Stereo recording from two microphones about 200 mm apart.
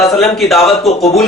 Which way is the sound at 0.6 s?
30° left (ahead or behind).